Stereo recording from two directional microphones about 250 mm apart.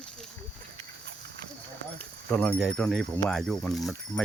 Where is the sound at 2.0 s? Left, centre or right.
Centre.